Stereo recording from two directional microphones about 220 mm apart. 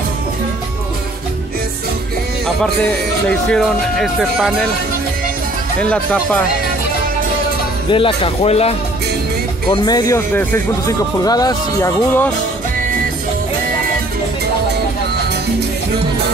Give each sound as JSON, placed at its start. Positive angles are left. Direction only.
{"t": 2.4, "sound": "speech", "side_deg": 5}
{"t": 5.8, "sound": "speech", "side_deg": 5}
{"t": 7.9, "sound": "speech", "side_deg": 25}
{"t": 9.7, "sound": "speech", "side_deg": 15}